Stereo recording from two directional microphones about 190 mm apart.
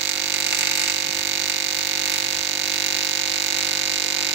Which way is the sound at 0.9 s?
65° right (ahead or behind).